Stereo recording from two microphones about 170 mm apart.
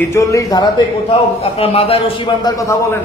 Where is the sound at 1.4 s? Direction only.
35° left (ahead or behind).